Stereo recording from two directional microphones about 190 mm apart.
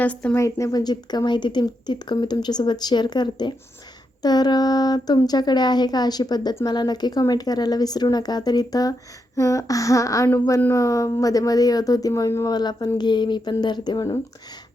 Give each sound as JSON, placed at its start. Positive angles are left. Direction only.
{"t": 0.0, "sound": "speech", "side_deg": 5}